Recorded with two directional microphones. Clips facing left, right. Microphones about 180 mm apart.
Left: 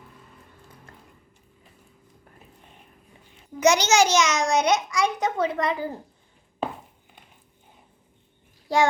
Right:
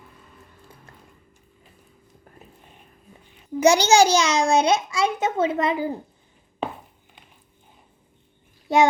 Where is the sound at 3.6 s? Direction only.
30° right (ahead or behind).